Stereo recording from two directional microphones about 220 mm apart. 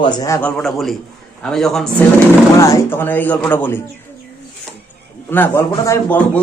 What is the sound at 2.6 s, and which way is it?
A man's voice, 15° left (ahead or behind).